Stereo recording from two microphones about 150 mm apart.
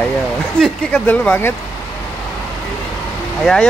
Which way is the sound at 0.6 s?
10° left (ahead or behind).